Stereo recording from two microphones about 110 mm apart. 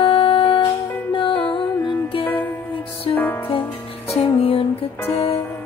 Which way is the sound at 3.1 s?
20° left (ahead or behind).